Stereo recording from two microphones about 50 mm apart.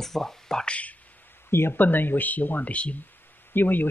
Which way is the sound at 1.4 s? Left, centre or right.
Left.